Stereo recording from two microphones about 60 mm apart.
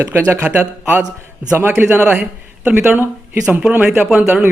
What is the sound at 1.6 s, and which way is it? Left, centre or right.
Speech, right.